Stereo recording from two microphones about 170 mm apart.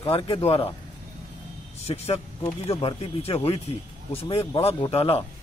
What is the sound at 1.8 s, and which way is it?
Speech, 40° left (ahead or behind).